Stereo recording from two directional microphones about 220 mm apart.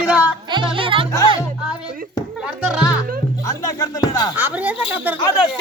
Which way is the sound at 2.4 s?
5° right (ahead or behind).